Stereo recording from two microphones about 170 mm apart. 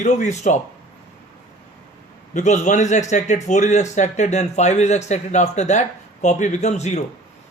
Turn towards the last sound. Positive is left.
turn(degrees=40)  # may be behind; listen again after turning